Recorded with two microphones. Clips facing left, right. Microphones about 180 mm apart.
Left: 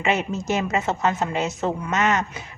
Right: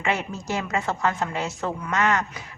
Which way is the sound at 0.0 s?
20° left (ahead or behind).